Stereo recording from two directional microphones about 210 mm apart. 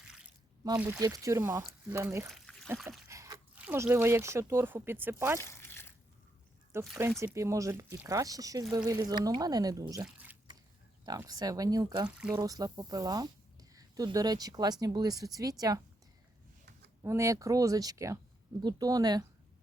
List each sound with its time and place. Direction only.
0.0 s a sound: 5° right (ahead or behind)
0.6 s speech: 15° right (ahead or behind)
2.3 s trickle: 5° left (ahead or behind)
2.7 s speech: centre (ahead or behind)
3.1 s speech: 15° right (ahead or behind)
5.4 s crumpling: 10° left (ahead or behind)
6.7 s speech: 10° right (ahead or behind)
12.0 s speech: 5° right (ahead or behind)
12.4 s speech: 20° right (ahead or behind)
17.0 s speech: 15° right (ahead or behind)